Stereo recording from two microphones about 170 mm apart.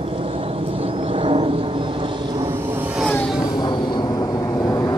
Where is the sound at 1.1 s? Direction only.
35° right (ahead or behind).